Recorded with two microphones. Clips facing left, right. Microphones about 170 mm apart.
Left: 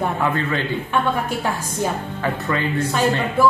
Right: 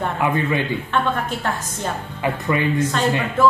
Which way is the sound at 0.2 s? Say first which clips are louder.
Right 1 dB; 15° right (ahead or behind).